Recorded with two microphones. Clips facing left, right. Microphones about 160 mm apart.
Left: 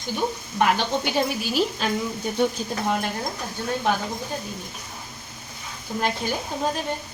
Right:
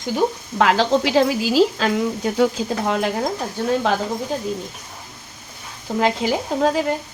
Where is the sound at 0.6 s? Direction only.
90° right.